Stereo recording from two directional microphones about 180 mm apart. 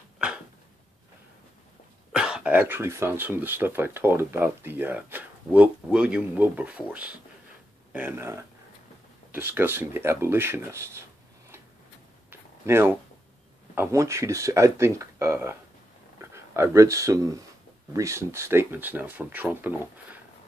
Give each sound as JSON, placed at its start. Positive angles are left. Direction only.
{"t": 2.1, "sound": "speech", "side_deg": -5}
{"t": 12.3, "sound": "a sound", "side_deg": -10}
{"t": 13.7, "sound": "speech", "side_deg": -15}